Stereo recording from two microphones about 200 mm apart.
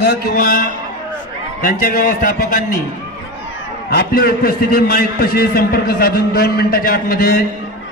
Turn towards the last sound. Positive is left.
turn(degrees=45)  # may be behind; listen again after turning